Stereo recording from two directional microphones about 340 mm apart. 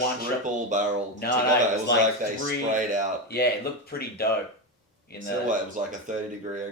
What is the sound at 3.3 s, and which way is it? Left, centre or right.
Speech, left.